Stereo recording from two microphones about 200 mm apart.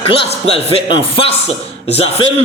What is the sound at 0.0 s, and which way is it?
A man's voice, 30° left (ahead or behind).